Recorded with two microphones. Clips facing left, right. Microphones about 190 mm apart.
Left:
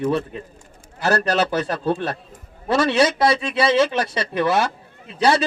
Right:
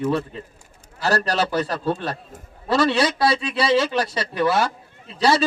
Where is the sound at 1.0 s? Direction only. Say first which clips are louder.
Left 2 dB; 20° left (ahead or behind).